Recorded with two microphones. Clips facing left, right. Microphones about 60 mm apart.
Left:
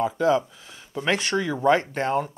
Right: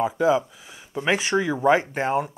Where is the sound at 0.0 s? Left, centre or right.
Centre.